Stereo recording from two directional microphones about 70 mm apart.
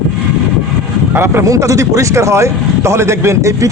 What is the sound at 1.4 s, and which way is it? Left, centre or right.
A man's voice, right.